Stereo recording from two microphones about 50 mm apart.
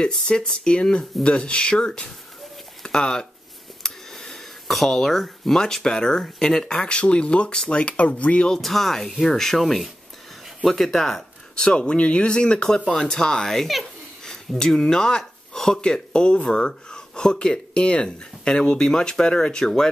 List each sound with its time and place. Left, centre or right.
0.1 s speech: centre
8.5 s speech: centre